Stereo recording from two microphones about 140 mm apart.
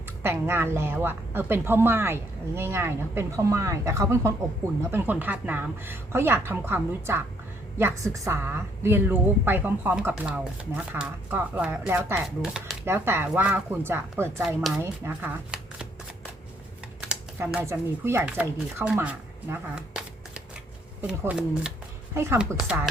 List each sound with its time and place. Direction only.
0.2 s a woman's voice: 15° right (ahead or behind)
12.8 s a woman's voice: 15° right (ahead or behind)
14.4 s speech: 5° right (ahead or behind)
14.8 s a woman's voice: 15° right (ahead or behind)
15.5 s shuffling cards: 5° right (ahead or behind)
17.6 s speech: 20° right (ahead or behind)
22.1 s a woman's voice: 20° right (ahead or behind)